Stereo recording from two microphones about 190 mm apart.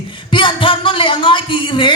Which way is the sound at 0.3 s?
25° left (ahead or behind).